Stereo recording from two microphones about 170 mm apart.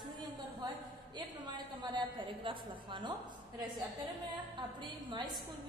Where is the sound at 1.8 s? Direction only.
25° right (ahead or behind).